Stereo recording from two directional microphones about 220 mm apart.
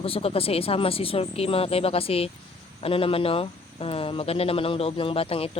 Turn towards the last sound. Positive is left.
turn(degrees=25)  # may be behind; listen again after turning